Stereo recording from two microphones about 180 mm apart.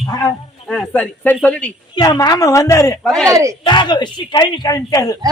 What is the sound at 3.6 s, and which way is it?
Speech, 25° left (ahead or behind).